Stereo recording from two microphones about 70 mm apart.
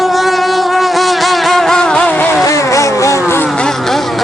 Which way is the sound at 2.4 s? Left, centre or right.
Left.